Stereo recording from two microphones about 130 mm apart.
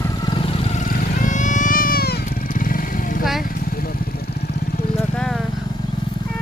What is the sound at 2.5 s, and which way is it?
Vehicle, 90° left.